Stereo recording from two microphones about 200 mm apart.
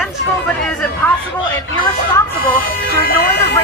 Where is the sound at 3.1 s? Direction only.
50° left (ahead or behind).